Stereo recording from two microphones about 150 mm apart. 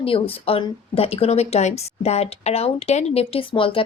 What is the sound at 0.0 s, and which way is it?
A woman's voice, 40° left (ahead or behind).